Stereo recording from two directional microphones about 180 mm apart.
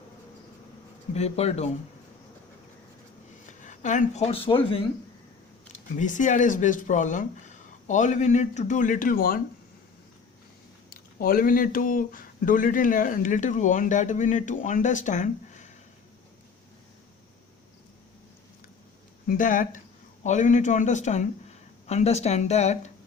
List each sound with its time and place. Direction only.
1.1 s speech: 35° left (ahead or behind)
3.6 s a woman's voice: 45° left (ahead or behind)
5.7 s speech: 45° left (ahead or behind)
10.8 s speech: 55° left (ahead or behind)
19.3 s speech: 50° left (ahead or behind)